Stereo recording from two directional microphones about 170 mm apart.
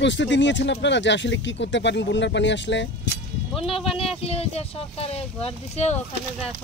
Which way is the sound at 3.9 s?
35° left (ahead or behind).